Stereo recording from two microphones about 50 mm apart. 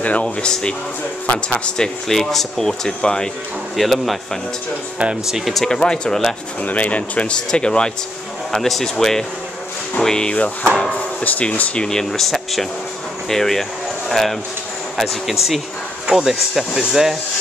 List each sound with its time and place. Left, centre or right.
0.0 s speech: left
0.5 s speech: centre
2.0 s speech: centre
3.7 s speech: centre
5.2 s speech: centre
5.5 s speech: centre
5.8 s speech: centre
6.6 s speech: left
8.5 s speech: centre; by 11.8 s left
11.8 s speech: centre